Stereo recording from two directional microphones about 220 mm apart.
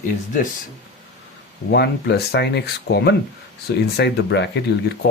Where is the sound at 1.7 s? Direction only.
45° left (ahead or behind).